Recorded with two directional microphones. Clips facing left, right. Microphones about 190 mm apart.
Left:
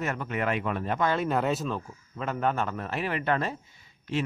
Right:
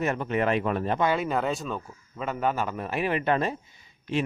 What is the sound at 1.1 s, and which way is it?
A man's voice, centre (ahead or behind).